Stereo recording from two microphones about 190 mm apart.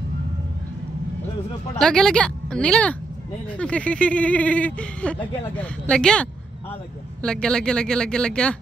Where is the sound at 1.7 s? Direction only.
5° left (ahead or behind).